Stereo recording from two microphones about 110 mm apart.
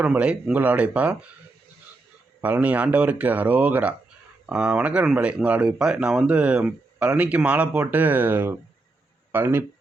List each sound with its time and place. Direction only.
0.0 s speech: 15° right (ahead or behind)
2.4 s speech: 15° right (ahead or behind)